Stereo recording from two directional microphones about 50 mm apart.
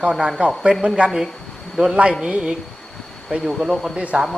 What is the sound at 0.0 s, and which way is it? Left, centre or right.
Speech, centre.